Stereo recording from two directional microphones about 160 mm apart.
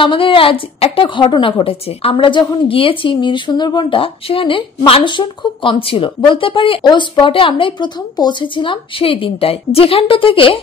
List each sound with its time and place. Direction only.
0.0 s a woman's voice: 35° left (ahead or behind)